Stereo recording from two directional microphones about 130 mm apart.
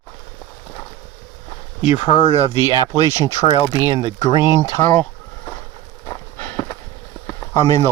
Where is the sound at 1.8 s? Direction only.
45° left (ahead or behind).